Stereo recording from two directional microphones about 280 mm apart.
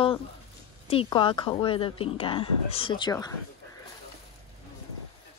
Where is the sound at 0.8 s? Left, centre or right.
Centre.